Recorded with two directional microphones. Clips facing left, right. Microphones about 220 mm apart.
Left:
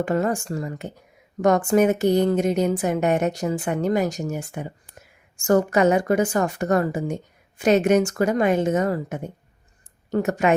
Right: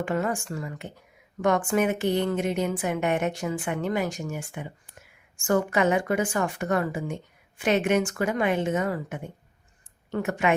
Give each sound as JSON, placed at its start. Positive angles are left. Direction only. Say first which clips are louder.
{"t": 0.0, "sound": "a woman's voice", "louder": "left 5 dB", "side_deg": 40}